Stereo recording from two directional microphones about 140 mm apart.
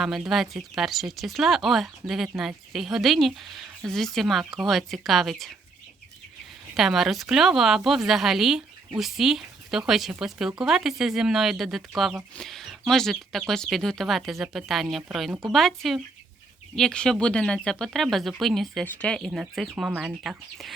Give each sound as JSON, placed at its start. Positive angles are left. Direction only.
{"t": 0.0, "sound": "speech", "side_deg": 0}
{"t": 6.7, "sound": "speech", "side_deg": 0}
{"t": 15.3, "sound": "speech", "side_deg": -25}
{"t": 15.5, "sound": "speech", "side_deg": 0}